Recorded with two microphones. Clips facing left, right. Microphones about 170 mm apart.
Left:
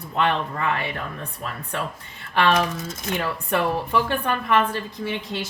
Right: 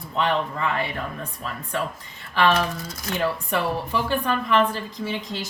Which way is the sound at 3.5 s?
60° left (ahead or behind).